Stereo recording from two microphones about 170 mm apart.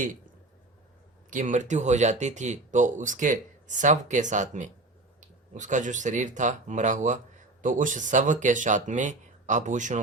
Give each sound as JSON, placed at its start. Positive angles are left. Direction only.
{"t": 1.3, "sound": "speech", "side_deg": -50}